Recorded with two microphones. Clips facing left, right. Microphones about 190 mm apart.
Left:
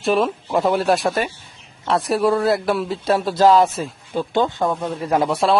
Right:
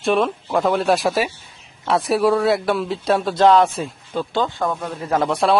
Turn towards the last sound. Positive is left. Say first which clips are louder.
# even
turn(degrees=0)  # may be behind; listen again after turning